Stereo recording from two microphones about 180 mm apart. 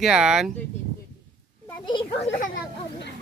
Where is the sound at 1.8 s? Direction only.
25° left (ahead or behind).